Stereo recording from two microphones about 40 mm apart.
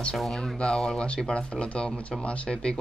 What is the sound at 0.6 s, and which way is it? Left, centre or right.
Speech, left.